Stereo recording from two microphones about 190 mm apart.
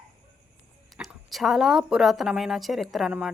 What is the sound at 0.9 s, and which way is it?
Speech, centre (ahead or behind).